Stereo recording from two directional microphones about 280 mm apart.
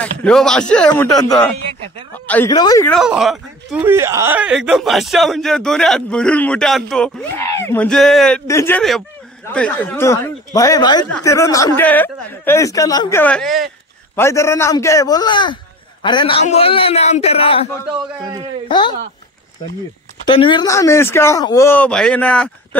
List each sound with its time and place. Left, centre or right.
0.0 s a man's voice: centre
2.9 s a man's voice: centre; by 17.6 s left
18.7 s a man's voice: centre
20.2 s a man's voice: centre